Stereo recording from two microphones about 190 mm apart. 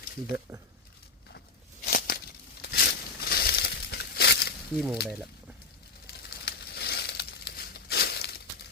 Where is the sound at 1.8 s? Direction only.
50° left (ahead or behind).